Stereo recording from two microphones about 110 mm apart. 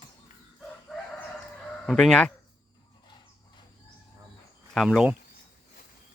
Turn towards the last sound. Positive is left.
turn(degrees=-5)  # may be behind; listen again after turning